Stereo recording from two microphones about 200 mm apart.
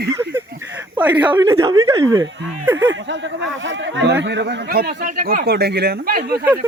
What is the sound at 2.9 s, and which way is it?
Speech, 65° right (ahead or behind).